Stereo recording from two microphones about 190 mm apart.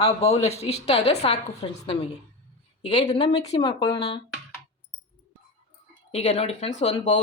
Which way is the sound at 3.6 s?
25° left (ahead or behind).